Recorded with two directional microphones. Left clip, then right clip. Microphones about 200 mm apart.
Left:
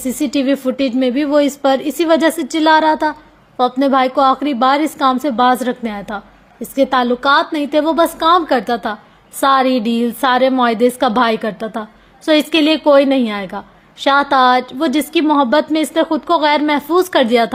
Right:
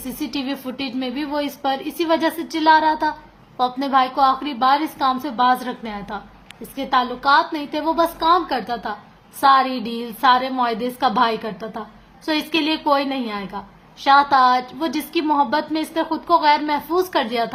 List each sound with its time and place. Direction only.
0.0 s a woman's voice: 40° left (ahead or behind)